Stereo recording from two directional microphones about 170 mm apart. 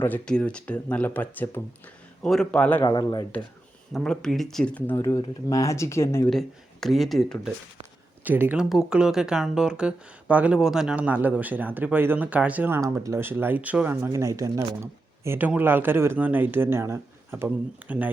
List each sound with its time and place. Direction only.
0.0 s speech: 10° left (ahead or behind)
2.8 s speech: 25° left (ahead or behind)
3.9 s speech: 5° left (ahead or behind)
6.3 s speech: centre (ahead or behind)
8.2 s speech: 10° right (ahead or behind)